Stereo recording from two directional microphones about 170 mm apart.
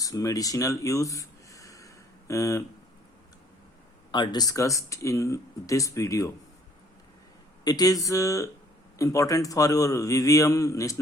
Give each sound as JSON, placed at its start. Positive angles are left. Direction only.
{"t": 0.0, "sound": "a sound", "side_deg": 20}
{"t": 4.1, "sound": "speech", "side_deg": 25}
{"t": 7.6, "sound": "speech", "side_deg": 20}